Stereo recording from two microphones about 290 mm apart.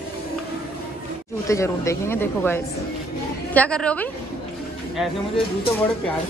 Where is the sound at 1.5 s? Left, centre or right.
Centre.